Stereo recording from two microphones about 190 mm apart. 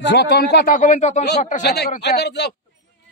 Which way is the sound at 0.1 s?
60° left (ahead or behind).